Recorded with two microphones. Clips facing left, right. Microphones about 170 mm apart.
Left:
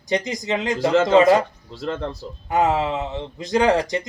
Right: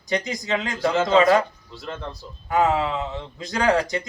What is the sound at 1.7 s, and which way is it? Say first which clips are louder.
Speech: left 7 dB; 90° left.